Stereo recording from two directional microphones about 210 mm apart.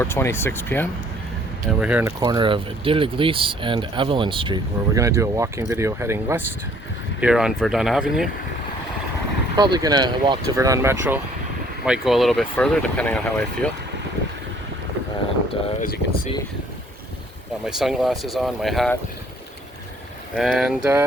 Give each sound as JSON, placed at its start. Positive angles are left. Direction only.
{"t": 0.0, "sound": "speech", "side_deg": 10}
{"t": 1.8, "sound": "speech", "side_deg": -10}
{"t": 2.2, "sound": "speech", "side_deg": -20}
{"t": 9.6, "sound": "speech", "side_deg": -20}
{"t": 11.9, "sound": "speech", "side_deg": 0}
{"t": 15.8, "sound": "speech", "side_deg": 40}
{"t": 17.7, "sound": "speech", "side_deg": 0}
{"t": 20.3, "sound": "speech", "side_deg": 0}